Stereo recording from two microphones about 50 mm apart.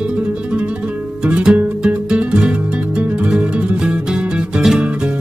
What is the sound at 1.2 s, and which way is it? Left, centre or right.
Music, centre.